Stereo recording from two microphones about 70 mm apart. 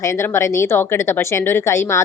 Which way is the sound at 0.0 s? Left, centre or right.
Left.